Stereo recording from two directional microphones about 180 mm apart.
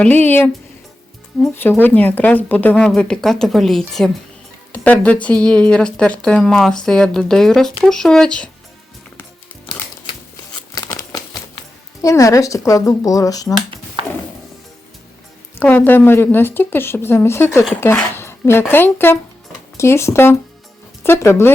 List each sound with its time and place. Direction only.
0.0 s speech: 10° left (ahead or behind)
1.5 s speech: 10° left (ahead or behind)
10.8 s crumpling: 20° left (ahead or behind)
12.0 s speech: 15° left (ahead or behind)
14.0 s a sound: 30° right (ahead or behind)
15.5 s speech: 10° left (ahead or behind)